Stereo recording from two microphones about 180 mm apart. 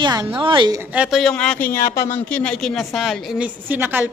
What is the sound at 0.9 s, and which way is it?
A woman's voice, 5° right (ahead or behind).